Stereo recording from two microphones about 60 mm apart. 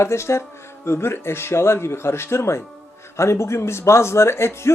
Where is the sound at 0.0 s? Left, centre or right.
Left.